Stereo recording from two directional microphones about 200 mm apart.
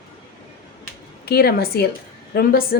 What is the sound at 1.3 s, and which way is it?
Speech, 50° left (ahead or behind).